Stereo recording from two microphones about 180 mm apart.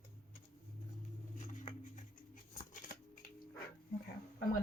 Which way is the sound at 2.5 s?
45° left (ahead or behind).